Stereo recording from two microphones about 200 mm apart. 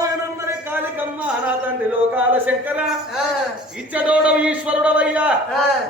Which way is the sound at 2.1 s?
10° right (ahead or behind).